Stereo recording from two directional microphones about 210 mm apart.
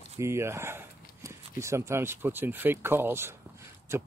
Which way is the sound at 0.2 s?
10° right (ahead or behind).